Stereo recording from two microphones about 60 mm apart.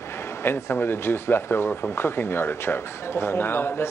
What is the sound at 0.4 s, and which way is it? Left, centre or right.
Speech, left.